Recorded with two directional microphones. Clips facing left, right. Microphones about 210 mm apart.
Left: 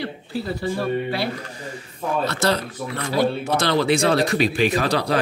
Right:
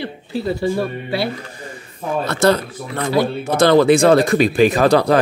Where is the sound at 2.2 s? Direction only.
55° right (ahead or behind).